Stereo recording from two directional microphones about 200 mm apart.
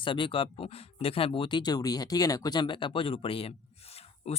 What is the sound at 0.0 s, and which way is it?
Speech, 25° left (ahead or behind).